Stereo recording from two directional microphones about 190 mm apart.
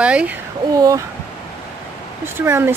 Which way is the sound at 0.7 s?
20° right (ahead or behind).